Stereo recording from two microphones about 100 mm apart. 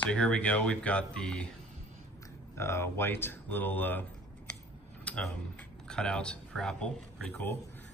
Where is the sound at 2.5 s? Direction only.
25° left (ahead or behind).